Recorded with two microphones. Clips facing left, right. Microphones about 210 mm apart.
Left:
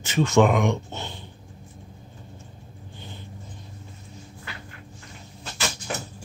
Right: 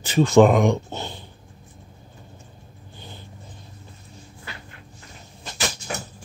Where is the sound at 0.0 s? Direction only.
35° right (ahead or behind).